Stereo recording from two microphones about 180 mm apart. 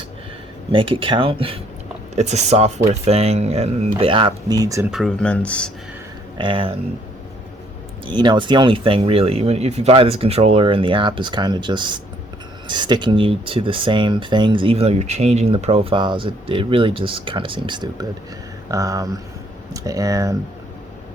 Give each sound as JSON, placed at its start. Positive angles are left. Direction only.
{"t": 0.7, "sound": "speech", "side_deg": -30}
{"t": 4.9, "sound": "speech", "side_deg": 0}
{"t": 6.3, "sound": "speech", "side_deg": -30}
{"t": 8.0, "sound": "speech", "side_deg": -25}